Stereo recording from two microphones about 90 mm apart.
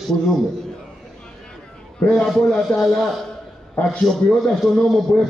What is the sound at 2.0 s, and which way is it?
A man's voice, 10° left (ahead or behind).